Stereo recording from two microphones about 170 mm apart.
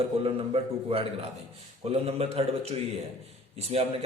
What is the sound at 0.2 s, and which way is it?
A man's voice, 35° right (ahead or behind).